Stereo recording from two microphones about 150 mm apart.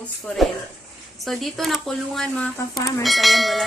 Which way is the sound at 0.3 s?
5° left (ahead or behind).